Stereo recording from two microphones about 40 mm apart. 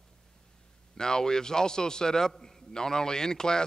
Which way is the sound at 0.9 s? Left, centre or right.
Centre.